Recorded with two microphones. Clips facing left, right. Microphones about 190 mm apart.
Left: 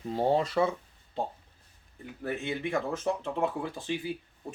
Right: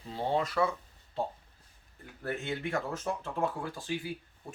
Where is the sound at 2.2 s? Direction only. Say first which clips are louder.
Left 2 dB; 15° left (ahead or behind).